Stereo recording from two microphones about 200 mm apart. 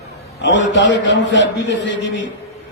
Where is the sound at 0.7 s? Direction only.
65° left (ahead or behind).